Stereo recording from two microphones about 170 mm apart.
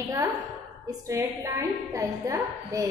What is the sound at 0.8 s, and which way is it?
A woman's voice, 20° right (ahead or behind).